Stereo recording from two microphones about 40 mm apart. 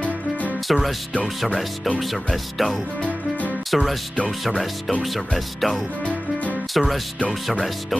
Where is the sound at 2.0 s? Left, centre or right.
Centre.